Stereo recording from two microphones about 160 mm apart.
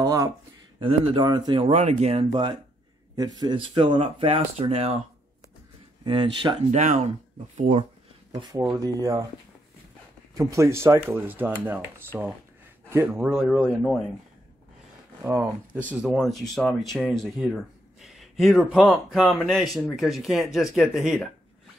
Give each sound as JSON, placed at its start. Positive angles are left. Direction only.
{"t": 0.0, "sound": "speech", "side_deg": -20}
{"t": 0.7, "sound": "speech", "side_deg": -35}
{"t": 1.6, "sound": "speech", "side_deg": -45}
{"t": 3.2, "sound": "speech", "side_deg": -25}
{"t": 6.0, "sound": "speech", "side_deg": -30}
{"t": 6.8, "sound": "speech", "side_deg": -50}
{"t": 8.3, "sound": "speech", "side_deg": -25}
{"t": 10.3, "sound": "speech", "side_deg": -20}
{"t": 15.2, "sound": "speech", "side_deg": -15}